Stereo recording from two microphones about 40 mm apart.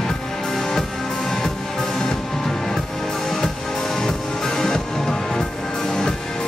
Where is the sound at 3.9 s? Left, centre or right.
Centre.